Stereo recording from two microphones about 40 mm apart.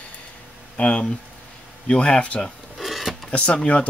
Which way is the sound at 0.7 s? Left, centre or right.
Left.